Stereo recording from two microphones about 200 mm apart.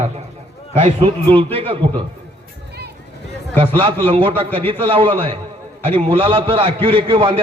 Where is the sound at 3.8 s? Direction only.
25° right (ahead or behind).